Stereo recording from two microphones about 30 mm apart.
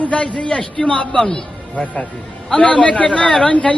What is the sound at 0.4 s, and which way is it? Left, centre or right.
A man's voice, left.